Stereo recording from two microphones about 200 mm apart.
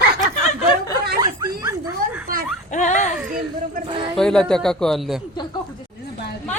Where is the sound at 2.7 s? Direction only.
40° left (ahead or behind).